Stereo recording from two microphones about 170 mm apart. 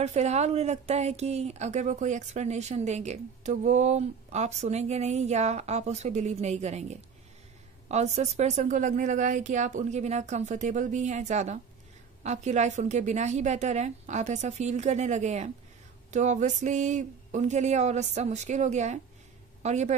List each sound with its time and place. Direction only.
0.0 s a woman's voice: 40° right (ahead or behind)